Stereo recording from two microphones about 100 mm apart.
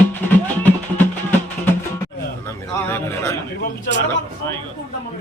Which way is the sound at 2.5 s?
25° left (ahead or behind).